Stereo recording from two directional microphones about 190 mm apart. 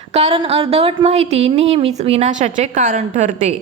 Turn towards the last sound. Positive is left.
turn(degrees=-40)  # may be behind; listen again after turning